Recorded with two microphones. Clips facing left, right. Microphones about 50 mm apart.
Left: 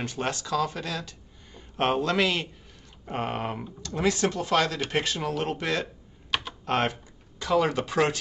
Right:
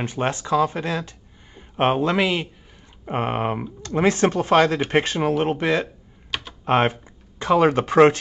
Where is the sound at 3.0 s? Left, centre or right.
Right.